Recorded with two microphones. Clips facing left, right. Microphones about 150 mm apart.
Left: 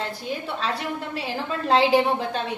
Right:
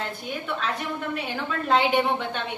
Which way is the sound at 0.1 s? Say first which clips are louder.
Left 1 dB; 35° left (ahead or behind).